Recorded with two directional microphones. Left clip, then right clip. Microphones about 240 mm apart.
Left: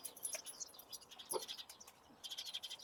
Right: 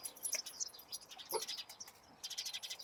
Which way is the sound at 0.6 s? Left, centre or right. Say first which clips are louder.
Right 7 dB; right.